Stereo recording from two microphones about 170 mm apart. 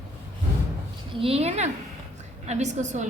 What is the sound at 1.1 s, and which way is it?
A woman's voice, 35° right (ahead or behind).